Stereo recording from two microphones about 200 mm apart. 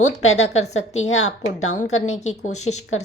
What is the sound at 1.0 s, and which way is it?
Speech, 90° left.